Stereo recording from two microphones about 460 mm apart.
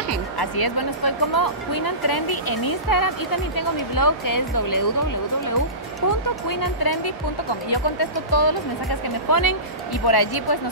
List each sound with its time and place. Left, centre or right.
0.4 s speech: left
6.6 s speech: left